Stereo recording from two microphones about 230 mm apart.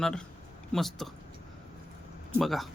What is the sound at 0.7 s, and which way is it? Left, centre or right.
Speech, centre.